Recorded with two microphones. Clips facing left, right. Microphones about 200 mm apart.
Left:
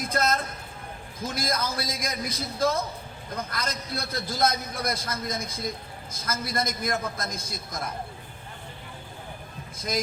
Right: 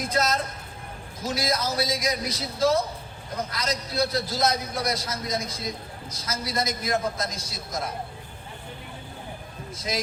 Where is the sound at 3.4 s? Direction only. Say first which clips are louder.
Right 3 dB; 50° left (ahead or behind).